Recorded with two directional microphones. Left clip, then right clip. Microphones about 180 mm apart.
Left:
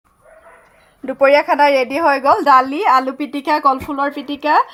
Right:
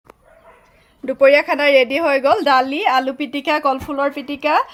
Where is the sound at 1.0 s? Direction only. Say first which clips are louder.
Even; 50° right (ahead or behind).